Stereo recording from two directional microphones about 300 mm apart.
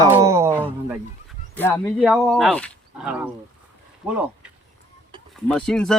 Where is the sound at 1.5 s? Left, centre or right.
Centre.